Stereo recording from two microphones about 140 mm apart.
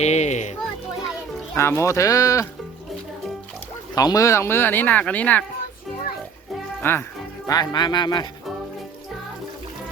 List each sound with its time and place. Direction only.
0.0 s a child's voice: 55° left (ahead or behind)
1.5 s speech: 20° left (ahead or behind)
3.9 s speech: 25° left (ahead or behind); by 5.5 s 10° left (ahead or behind)
6.8 s speech: 15° left (ahead or behind)
7.4 s speech: 30° left (ahead or behind)